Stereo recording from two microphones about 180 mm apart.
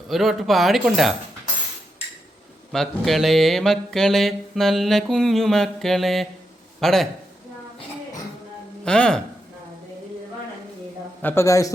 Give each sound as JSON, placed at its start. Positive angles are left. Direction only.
{"t": 0.1, "sound": "mantra", "side_deg": 0}
{"t": 2.7, "sound": "mantra", "side_deg": 0}
{"t": 6.7, "sound": "a man's voice", "side_deg": 0}
{"t": 8.8, "sound": "speech", "side_deg": 5}
{"t": 11.2, "sound": "a man's voice", "side_deg": 10}